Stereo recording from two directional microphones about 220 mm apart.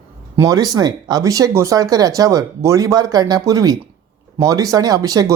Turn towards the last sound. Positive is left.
turn(degrees=-15)  # may be behind; listen again after turning